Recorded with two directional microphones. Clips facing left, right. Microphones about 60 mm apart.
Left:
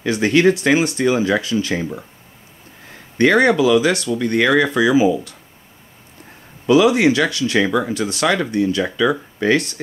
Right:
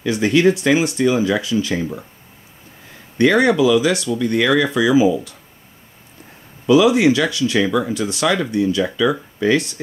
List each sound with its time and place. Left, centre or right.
0.0 s speech: left
3.2 s speech: left
6.7 s speech: left